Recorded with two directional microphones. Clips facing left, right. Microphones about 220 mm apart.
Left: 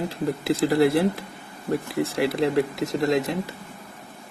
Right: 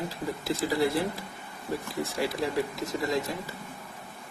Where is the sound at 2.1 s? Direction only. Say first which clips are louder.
Left 7 dB; 70° left (ahead or behind).